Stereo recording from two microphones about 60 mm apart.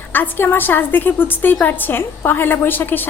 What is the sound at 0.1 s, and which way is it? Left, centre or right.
A woman's voice, left.